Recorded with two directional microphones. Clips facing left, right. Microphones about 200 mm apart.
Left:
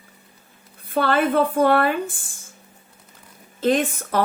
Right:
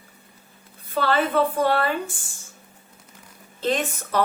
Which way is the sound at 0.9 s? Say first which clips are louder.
Left 2 dB; 50° left (ahead or behind).